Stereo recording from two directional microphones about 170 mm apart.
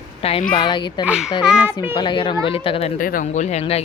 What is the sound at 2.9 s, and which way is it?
Speech, 50° left (ahead or behind).